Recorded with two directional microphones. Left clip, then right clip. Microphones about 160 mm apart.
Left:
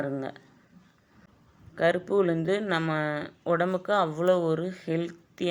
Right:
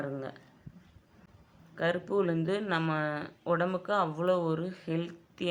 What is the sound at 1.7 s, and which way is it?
Speech, 30° left (ahead or behind).